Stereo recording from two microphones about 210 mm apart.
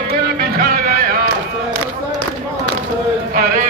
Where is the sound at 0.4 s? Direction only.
45° right (ahead or behind).